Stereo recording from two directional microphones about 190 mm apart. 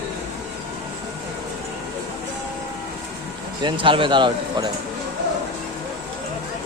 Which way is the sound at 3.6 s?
25° right (ahead or behind).